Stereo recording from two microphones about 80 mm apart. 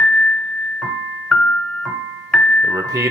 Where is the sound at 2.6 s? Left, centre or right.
Right.